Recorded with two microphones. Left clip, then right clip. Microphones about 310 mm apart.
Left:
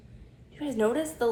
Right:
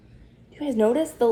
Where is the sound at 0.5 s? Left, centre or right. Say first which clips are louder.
Right 6 dB; right.